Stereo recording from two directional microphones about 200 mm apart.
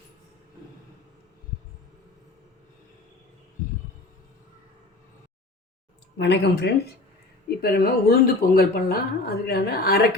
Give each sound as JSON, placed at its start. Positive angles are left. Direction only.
{"t": 6.1, "sound": "speech", "side_deg": 60}